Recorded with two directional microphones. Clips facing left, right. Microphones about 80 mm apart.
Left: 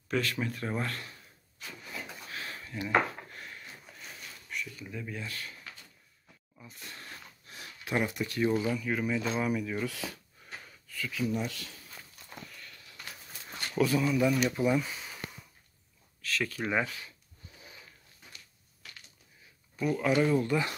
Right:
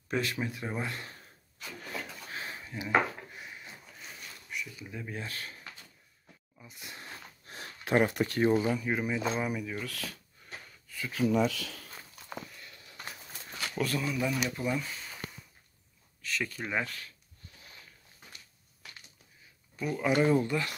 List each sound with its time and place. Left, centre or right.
0.1 s speech: right
2.2 s a sound: right
4.5 s speech: centre
5.1 s speech: right
6.6 s speech: centre
7.4 s a sound: right
8.5 s speech: right; by 9.8 s centre
9.8 s speech: centre
11.2 s speech: right
12.5 s a sound: right
13.5 s speech: centre
16.2 s speech: centre
19.8 s speech: centre
20.2 s speech: right